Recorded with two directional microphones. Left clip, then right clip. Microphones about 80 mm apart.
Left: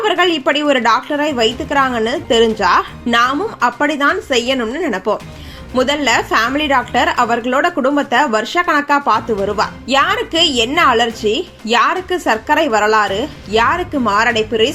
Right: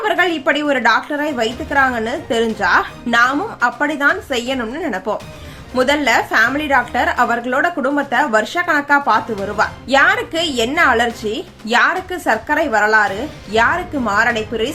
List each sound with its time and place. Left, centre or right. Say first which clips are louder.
0.0 s a woman's voice: left 2 dB; left